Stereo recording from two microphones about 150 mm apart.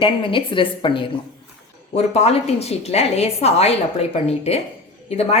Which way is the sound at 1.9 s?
45° left (ahead or behind).